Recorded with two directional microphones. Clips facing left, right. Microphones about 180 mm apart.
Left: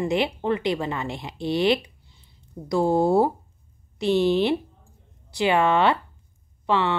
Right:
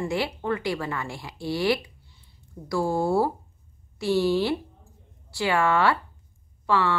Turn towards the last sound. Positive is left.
turn(degrees=20)  # may be behind; listen again after turning